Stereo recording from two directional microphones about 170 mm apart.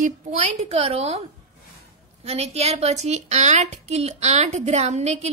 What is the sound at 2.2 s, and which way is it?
A woman's voice, 40° right (ahead or behind).